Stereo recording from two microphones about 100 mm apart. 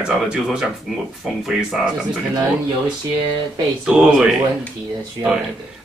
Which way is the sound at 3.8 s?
10° right (ahead or behind).